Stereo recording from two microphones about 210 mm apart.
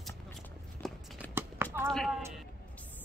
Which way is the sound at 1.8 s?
Centre (ahead or behind).